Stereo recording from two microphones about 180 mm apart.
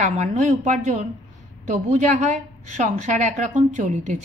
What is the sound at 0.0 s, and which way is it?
A woman's voice, 40° right (ahead or behind).